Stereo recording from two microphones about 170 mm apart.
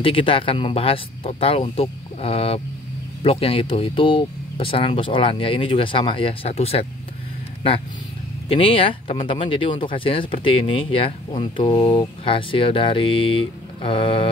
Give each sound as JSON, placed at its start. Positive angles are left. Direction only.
{"t": 0.0, "sound": "speech", "side_deg": 30}
{"t": 8.5, "sound": "speech", "side_deg": 30}